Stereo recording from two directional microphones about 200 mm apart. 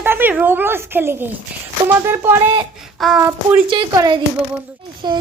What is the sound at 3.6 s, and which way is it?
Speech, 20° right (ahead or behind).